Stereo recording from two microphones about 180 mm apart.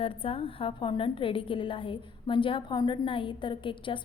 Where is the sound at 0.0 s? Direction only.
30° left (ahead or behind).